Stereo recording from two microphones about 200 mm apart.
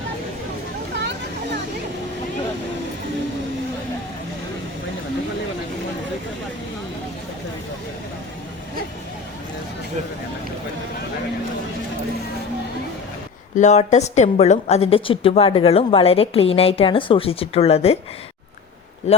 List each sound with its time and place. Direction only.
0.9 s a sound: 60° right (ahead or behind)
13.6 s a woman's voice: 35° left (ahead or behind)
19.1 s a man's voice: 30° left (ahead or behind)